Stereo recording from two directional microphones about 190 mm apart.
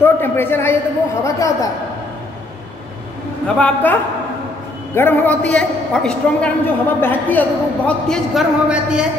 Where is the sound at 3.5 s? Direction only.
10° left (ahead or behind).